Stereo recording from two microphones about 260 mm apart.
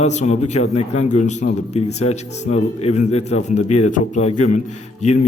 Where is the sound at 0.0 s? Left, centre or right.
Left.